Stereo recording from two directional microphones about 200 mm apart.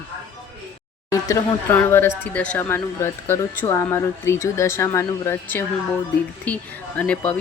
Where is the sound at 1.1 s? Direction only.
15° left (ahead or behind).